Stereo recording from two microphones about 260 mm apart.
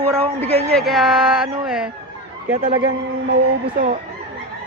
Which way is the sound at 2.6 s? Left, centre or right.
Right.